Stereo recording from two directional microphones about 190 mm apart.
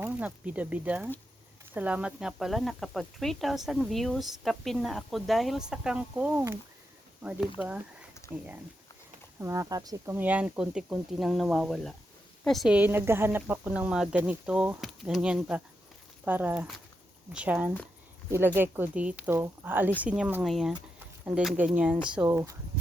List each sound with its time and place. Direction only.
0.0 s speech: 10° right (ahead or behind)
8.3 s speech: 15° left (ahead or behind)
9.4 s speech: 15° right (ahead or behind)